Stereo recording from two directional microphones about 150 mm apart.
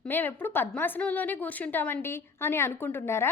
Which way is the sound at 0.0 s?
15° left (ahead or behind).